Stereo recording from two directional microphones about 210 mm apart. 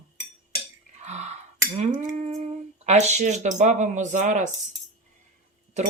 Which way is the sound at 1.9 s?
35° right (ahead or behind).